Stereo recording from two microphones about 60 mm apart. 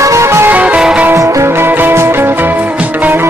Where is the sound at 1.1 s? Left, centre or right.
Right.